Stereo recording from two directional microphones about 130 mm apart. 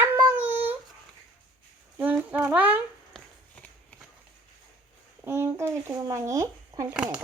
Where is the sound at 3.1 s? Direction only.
5° left (ahead or behind).